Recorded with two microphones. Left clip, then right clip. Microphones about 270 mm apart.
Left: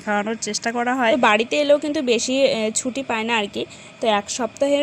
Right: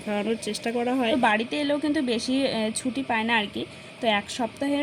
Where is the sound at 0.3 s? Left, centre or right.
Left.